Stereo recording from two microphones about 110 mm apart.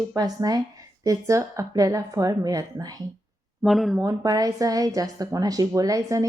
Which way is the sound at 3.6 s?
Centre (ahead or behind).